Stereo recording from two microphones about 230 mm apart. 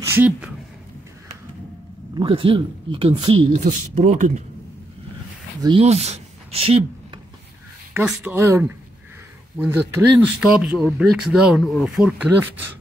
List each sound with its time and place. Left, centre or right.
0.1 s speech: centre
2.1 s speech: right
5.6 s speech: right
7.9 s speech: centre